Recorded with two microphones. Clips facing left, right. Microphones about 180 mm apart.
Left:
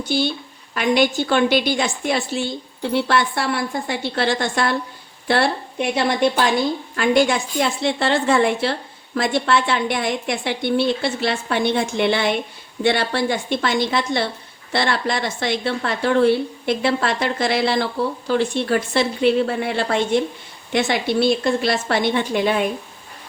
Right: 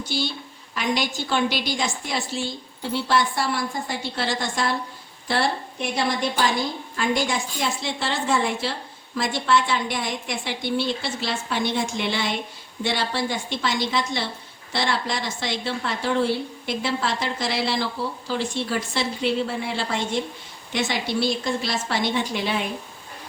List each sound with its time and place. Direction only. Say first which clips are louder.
0.0 s a woman's voice: left 6 dB; 60° left (ahead or behind)